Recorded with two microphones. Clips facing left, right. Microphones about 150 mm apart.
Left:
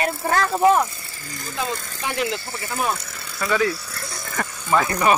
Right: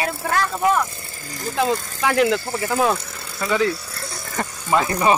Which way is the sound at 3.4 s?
25° right (ahead or behind).